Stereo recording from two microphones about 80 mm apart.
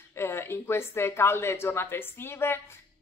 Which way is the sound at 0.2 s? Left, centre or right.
Left.